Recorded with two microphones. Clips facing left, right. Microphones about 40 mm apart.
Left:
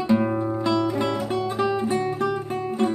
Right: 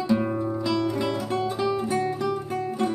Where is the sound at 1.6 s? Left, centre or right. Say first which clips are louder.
Left 4 dB; left.